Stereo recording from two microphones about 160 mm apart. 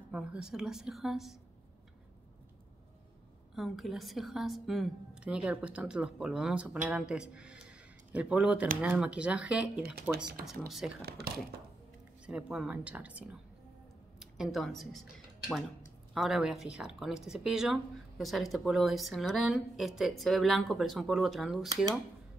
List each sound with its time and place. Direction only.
0.1 s speech: 5° right (ahead or behind)
3.5 s speech: centre (ahead or behind)
11.1 s speech: 75° right (ahead or behind)
12.3 s speech: 5° right (ahead or behind)
14.4 s speech: centre (ahead or behind)